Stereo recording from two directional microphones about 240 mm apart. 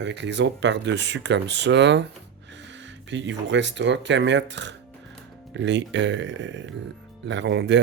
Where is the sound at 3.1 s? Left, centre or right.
Right.